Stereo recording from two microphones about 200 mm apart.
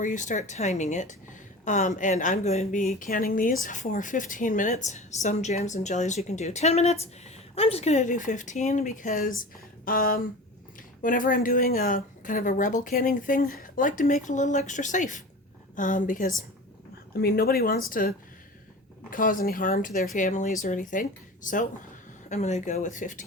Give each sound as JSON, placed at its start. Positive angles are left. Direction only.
{"t": 0.0, "sound": "a woman's voice", "side_deg": 40}
{"t": 19.1, "sound": "a woman's voice", "side_deg": 45}